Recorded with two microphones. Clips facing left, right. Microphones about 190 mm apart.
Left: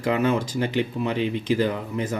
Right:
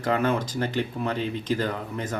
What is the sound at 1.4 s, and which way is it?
Speech, 10° left (ahead or behind).